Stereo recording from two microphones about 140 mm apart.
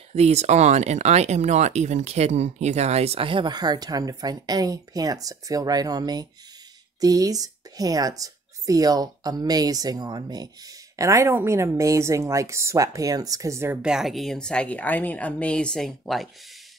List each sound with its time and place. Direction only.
0.1 s a woman's voice: 50° right (ahead or behind); by 13.7 s 20° right (ahead or behind)
13.8 s a woman's voice: centre (ahead or behind)